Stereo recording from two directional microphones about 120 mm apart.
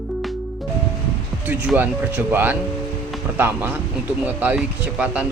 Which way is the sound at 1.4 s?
15° right (ahead or behind).